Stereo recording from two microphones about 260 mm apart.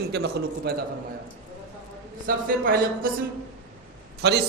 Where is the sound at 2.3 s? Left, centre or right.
Right.